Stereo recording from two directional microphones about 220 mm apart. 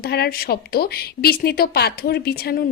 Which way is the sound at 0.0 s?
45° left (ahead or behind).